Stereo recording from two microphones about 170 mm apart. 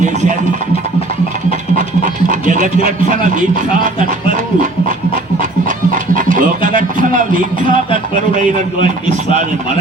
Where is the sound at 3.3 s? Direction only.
50° right (ahead or behind).